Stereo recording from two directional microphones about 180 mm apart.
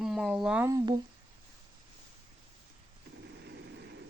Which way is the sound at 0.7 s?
20° right (ahead or behind).